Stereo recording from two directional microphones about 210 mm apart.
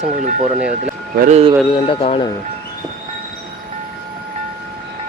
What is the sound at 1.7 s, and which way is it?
Speech, 25° left (ahead or behind).